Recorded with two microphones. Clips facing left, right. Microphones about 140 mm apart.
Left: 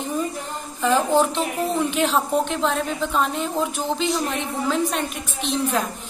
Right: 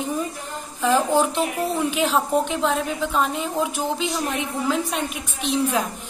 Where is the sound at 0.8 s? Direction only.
10° right (ahead or behind).